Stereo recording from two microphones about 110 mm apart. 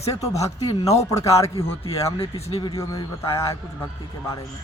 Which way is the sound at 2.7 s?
30° left (ahead or behind).